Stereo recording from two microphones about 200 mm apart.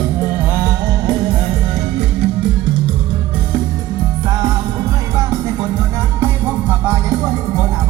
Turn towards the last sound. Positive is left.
turn(degrees=-10)  # may be behind; listen again after turning